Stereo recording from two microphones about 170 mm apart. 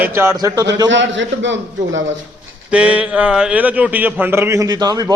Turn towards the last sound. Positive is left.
turn(degrees=-20)  # may be behind; listen again after turning